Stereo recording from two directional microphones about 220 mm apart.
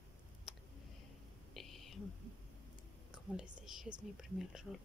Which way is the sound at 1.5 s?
Centre (ahead or behind).